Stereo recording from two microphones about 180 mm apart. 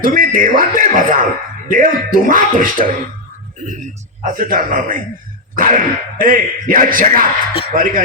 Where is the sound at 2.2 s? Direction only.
50° right (ahead or behind).